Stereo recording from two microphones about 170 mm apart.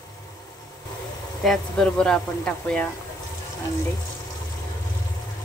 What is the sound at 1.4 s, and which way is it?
A woman's voice, 5° left (ahead or behind).